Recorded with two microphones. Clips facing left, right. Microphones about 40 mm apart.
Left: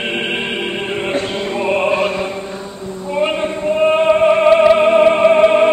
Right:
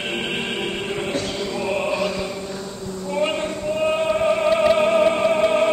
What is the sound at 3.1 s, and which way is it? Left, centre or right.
Music, left.